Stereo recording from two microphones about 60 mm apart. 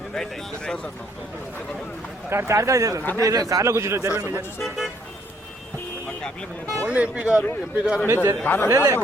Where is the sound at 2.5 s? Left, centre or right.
Right.